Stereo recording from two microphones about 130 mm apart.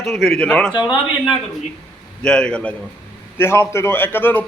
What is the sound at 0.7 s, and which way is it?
Speech, 35° left (ahead or behind).